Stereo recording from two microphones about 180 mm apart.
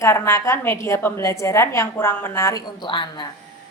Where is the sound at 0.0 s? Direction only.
15° left (ahead or behind).